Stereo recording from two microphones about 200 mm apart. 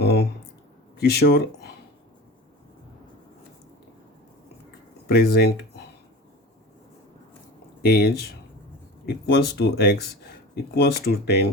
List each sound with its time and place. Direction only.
0.0 s a sound: 55° left (ahead or behind)
0.9 s speech: 55° left (ahead or behind)
5.0 s speech: 50° left (ahead or behind)
7.8 s speech: 55° left (ahead or behind)